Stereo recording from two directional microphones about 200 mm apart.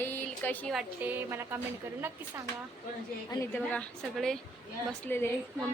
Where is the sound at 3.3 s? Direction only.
10° left (ahead or behind).